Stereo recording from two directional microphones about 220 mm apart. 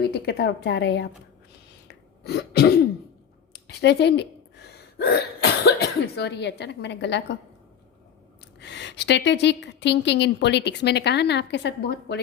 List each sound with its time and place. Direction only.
0.1 s a woman's voice: 50° left (ahead or behind)
2.2 s a woman's voice: 45° left (ahead or behind)
8.5 s a woman's voice: 50° left (ahead or behind)